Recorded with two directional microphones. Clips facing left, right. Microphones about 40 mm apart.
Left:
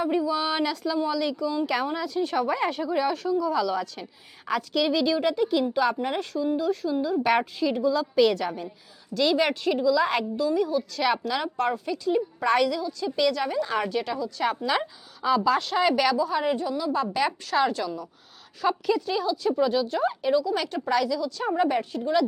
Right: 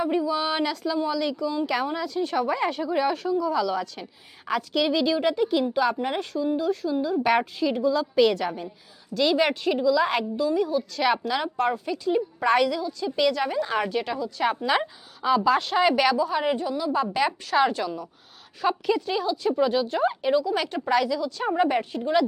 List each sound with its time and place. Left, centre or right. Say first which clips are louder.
0.0 s speech: even; centre
2.9 s a woman's voice: right 1 dB; centre
17.6 s a woman's voice: right 2 dB; right